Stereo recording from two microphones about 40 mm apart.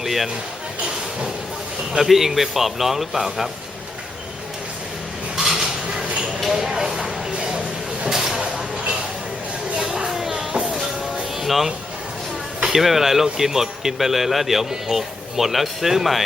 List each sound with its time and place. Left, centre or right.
0.0 s speech: centre
2.0 s speech: centre
5.4 s dishes: centre
6.5 s a sound: centre
9.7 s music: centre
11.3 s music: centre
12.6 s speech: centre